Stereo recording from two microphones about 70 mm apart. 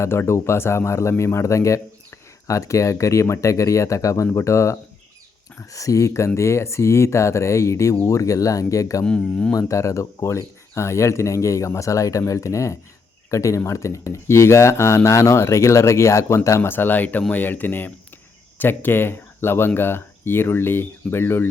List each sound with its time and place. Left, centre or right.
0.0 s speech: left
9.0 s speech: centre
9.6 s speech: left